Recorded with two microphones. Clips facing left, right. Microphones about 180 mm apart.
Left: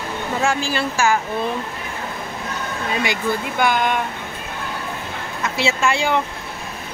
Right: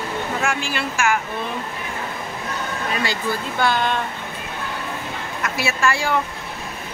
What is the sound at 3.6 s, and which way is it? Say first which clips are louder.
Speech: left 1 dB; 15° left (ahead or behind).